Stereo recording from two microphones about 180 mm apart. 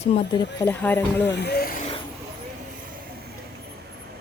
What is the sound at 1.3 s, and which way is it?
Speech, 65° left (ahead or behind).